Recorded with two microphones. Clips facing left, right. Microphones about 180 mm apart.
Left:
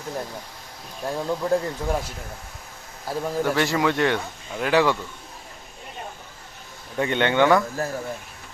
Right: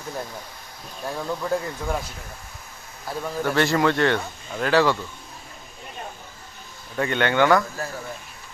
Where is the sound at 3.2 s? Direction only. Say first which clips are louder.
Right 1 dB; 10° left (ahead or behind).